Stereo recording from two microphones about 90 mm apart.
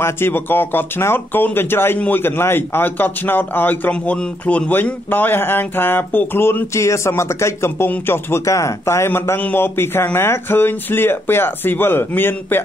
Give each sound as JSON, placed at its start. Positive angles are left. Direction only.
{"t": 0.0, "sound": "a man's voice", "side_deg": 25}